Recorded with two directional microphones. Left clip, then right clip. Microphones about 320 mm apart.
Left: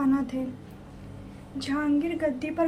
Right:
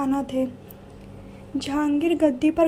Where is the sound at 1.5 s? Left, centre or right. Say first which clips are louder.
Right 4 dB; right.